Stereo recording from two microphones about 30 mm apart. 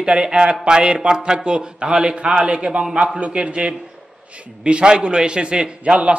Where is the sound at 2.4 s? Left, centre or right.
Right.